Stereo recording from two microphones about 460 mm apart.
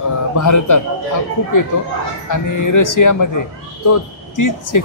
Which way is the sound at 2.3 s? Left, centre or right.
Left.